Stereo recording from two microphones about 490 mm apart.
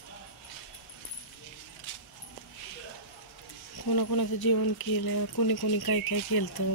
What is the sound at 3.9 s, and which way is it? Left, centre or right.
Speech, left.